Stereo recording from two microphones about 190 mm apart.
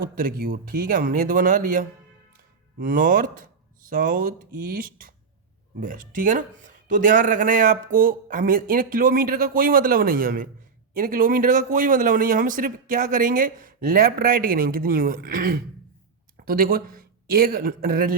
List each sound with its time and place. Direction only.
0.0 s speech: 50° right (ahead or behind)